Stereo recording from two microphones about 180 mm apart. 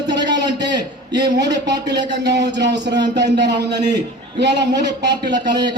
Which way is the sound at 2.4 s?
70° right (ahead or behind).